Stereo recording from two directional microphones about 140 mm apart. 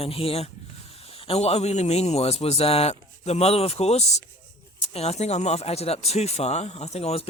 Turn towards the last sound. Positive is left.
turn(degrees=45)  # may be behind; listen again after turning